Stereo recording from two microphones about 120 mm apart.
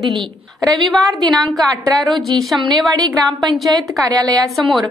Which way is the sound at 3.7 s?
30° right (ahead or behind).